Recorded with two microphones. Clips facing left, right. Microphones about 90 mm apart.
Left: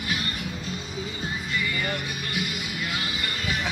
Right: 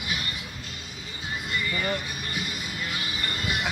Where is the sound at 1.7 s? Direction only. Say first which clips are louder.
Even; 25° right (ahead or behind).